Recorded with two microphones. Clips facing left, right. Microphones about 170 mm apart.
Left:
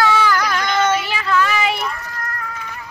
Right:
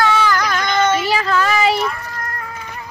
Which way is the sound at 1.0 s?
40° right (ahead or behind).